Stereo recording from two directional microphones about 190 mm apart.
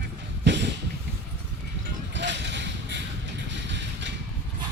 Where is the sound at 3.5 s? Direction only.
70° right (ahead or behind).